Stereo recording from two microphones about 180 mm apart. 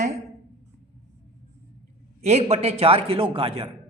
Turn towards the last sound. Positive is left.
turn(degrees=-30)  # may be behind; listen again after turning